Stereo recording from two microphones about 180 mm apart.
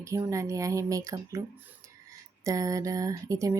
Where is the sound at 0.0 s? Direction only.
15° right (ahead or behind).